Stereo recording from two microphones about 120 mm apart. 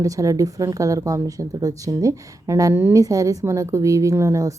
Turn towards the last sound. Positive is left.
turn(degrees=-25)  # may be behind; listen again after turning